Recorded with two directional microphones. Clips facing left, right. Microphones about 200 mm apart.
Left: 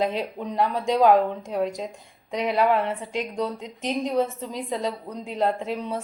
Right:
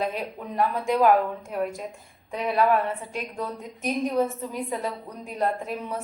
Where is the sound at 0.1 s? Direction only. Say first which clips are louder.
Left 3 dB; 25° left (ahead or behind).